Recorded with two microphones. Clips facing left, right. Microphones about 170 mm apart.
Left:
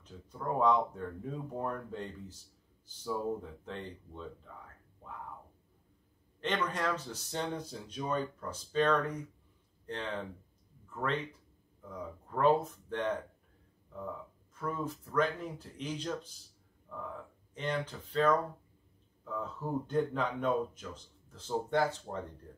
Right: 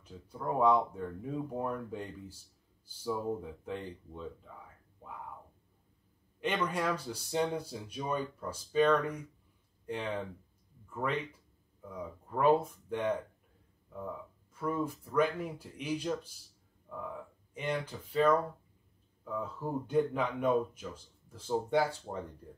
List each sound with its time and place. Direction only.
0.0 s speech: 10° right (ahead or behind)
3.3 s speech: 10° right (ahead or behind)
6.4 s speech: 10° right (ahead or behind)
14.5 s speech: 10° right (ahead or behind)